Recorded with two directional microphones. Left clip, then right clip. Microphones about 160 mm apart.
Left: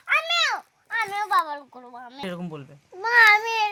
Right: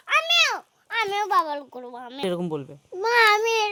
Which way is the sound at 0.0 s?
80° right.